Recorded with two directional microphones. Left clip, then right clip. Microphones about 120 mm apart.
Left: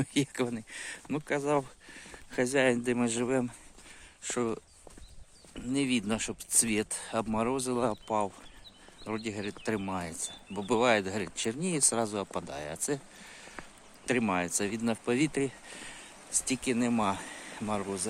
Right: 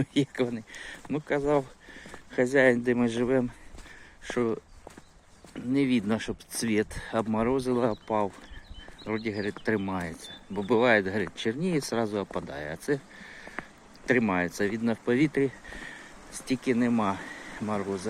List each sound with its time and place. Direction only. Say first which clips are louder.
0.0 s speech: right 3 dB; 50° left (ahead or behind); by 4.6 s 30° left (ahead or behind)
5.5 s speech: right 4 dB; 20° left (ahead or behind)